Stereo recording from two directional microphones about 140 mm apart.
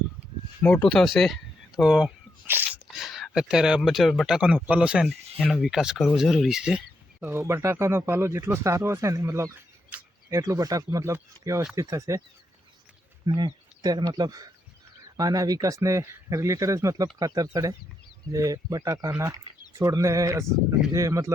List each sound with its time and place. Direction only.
0.6 s speech: 5° left (ahead or behind); by 12.2 s 20° right (ahead or behind)
13.2 s speech: 30° right (ahead or behind)